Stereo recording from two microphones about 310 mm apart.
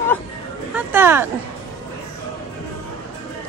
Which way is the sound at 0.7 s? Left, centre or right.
Centre.